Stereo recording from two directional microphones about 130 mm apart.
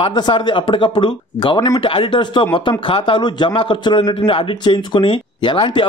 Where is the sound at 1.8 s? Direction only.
40° left (ahead or behind).